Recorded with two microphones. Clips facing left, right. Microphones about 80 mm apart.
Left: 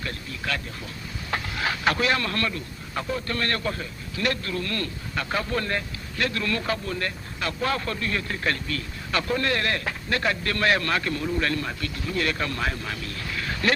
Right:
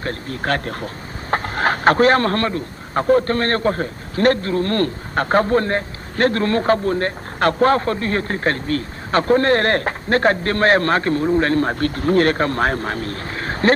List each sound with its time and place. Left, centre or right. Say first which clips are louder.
0.0 s speech: right 8 dB; right